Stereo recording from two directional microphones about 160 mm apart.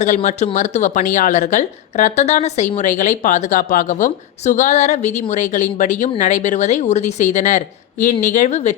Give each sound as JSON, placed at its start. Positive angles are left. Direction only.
{"t": 0.0, "sound": "speech", "side_deg": 50}